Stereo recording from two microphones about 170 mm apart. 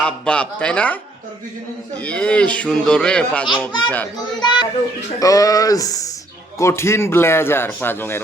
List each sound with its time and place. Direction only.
0.0 s a man's voice: 5° left (ahead or behind)
2.0 s a man's voice: 5° left (ahead or behind)
4.4 s a sound: 25° left (ahead or behind)
6.6 s a man's voice: 15° left (ahead or behind)